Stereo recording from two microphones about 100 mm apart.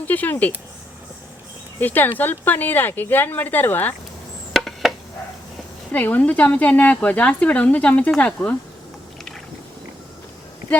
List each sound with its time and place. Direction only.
0.0 s speech: 15° left (ahead or behind)
1.8 s speech: 20° left (ahead or behind)
4.5 s a sound: centre (ahead or behind)
5.9 s speech: 15° left (ahead or behind)